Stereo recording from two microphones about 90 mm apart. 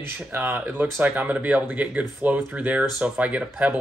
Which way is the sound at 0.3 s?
25° right (ahead or behind).